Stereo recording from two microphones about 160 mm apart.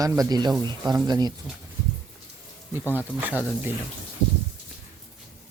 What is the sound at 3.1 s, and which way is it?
Speech, 10° right (ahead or behind).